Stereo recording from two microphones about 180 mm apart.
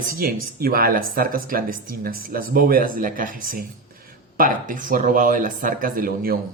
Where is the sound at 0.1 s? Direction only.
55° right (ahead or behind).